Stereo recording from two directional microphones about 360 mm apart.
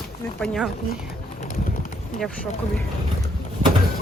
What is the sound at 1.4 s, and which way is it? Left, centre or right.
Clip-clop, left.